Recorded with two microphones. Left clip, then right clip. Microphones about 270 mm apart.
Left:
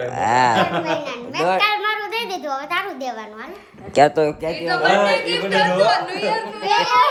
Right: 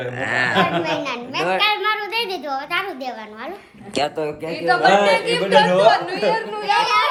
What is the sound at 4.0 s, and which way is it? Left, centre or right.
Speech, left.